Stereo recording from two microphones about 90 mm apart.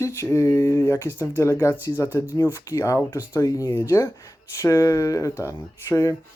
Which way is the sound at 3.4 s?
45° left (ahead or behind).